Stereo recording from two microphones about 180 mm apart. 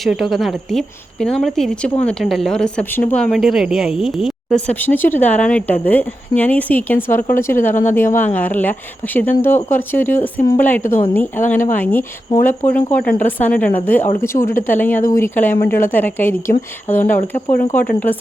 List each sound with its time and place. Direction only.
0.0 s a woman's voice: centre (ahead or behind)